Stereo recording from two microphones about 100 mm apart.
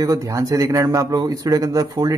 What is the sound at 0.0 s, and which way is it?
Speech, 35° right (ahead or behind).